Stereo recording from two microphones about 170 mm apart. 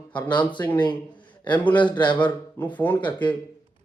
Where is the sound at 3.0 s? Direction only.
25° left (ahead or behind).